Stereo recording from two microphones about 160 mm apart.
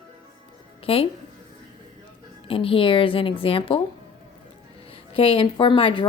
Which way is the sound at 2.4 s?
35° left (ahead or behind).